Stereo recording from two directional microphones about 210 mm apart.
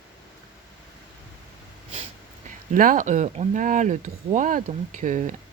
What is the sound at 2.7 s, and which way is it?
Speech, 40° right (ahead or behind).